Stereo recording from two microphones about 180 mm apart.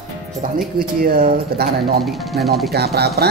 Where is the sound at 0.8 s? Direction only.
55° right (ahead or behind).